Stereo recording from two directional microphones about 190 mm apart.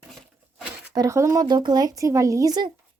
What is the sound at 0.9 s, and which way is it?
Speech, 15° right (ahead or behind).